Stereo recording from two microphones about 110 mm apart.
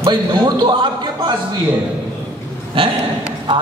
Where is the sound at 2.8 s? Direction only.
50° right (ahead or behind).